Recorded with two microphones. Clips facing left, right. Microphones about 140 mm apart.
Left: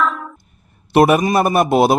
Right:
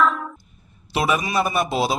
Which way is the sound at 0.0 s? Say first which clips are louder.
Even; centre (ahead or behind).